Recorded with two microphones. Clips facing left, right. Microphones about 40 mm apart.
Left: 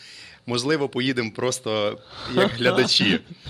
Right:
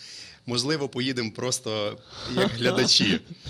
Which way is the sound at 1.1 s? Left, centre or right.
Left.